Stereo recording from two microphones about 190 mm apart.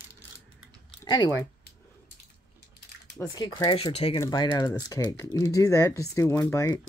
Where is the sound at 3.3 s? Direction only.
20° left (ahead or behind).